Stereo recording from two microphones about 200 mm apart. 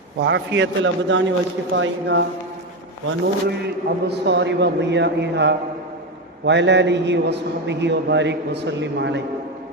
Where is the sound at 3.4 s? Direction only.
55° right (ahead or behind).